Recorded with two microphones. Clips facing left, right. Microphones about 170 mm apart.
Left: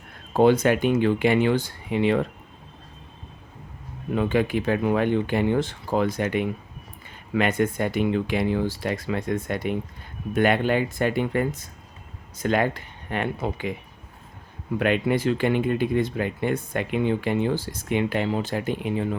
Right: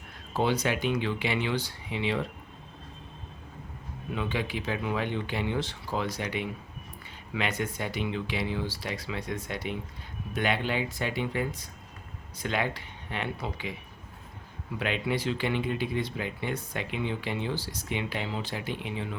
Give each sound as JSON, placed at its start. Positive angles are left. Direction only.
{"t": 0.3, "sound": "speech", "side_deg": 50}
{"t": 4.1, "sound": "speech", "side_deg": 50}
{"t": 14.8, "sound": "speech", "side_deg": 55}